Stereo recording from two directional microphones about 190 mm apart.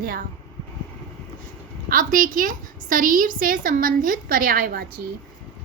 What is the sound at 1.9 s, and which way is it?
A woman's voice, 45° right (ahead or behind).